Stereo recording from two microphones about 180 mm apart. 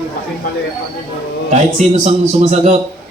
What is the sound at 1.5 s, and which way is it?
Speech, 40° right (ahead or behind).